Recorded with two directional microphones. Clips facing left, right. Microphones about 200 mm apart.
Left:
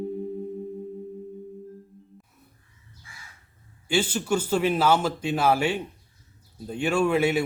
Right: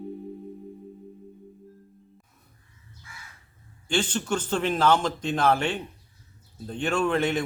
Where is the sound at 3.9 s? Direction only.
10° left (ahead or behind).